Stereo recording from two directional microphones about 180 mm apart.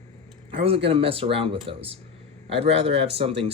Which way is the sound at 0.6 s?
30° right (ahead or behind).